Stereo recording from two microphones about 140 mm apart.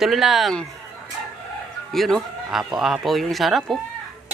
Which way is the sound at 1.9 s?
Centre (ahead or behind).